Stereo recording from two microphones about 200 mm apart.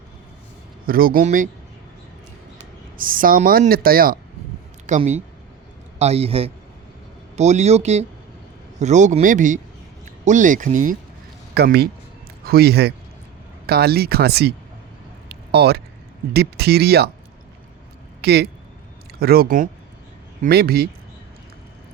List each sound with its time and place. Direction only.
0.9 s speech: 45° right (ahead or behind)
3.0 s speech: 45° right (ahead or behind)
4.9 s a man's voice: 35° right (ahead or behind)
11.5 s speech: 55° right (ahead or behind)
15.3 s a sound: 55° right (ahead or behind)
16.3 s speech: 55° right (ahead or behind)
18.2 s speech: 55° right (ahead or behind)